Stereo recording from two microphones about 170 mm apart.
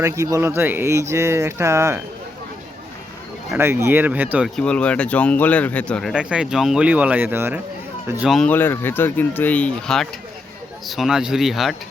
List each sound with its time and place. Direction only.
0.0 s speech: 15° right (ahead or behind)
3.5 s speech: 15° right (ahead or behind)
4.4 s speech: 5° left (ahead or behind); by 7.6 s 10° right (ahead or behind)
8.3 s speech: 5° left (ahead or behind)